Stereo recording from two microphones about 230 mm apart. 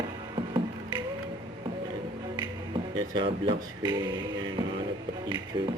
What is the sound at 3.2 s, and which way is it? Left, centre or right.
Speech, right.